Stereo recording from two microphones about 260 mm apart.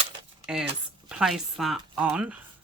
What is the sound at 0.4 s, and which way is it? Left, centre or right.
Speech, centre.